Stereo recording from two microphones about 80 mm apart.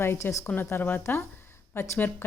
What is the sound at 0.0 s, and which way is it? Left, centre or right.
Speech, left.